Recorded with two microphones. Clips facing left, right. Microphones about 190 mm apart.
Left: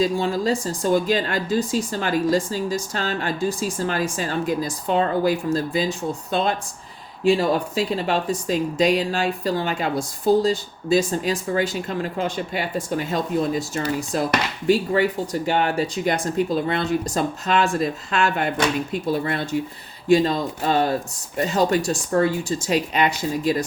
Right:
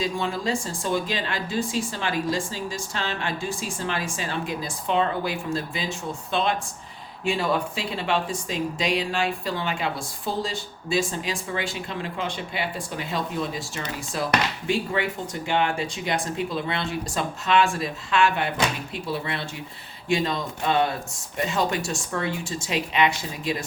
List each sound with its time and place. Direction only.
0.0 s speech: 40° left (ahead or behind)